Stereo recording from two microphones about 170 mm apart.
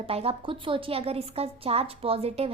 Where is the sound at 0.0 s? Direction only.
35° right (ahead or behind).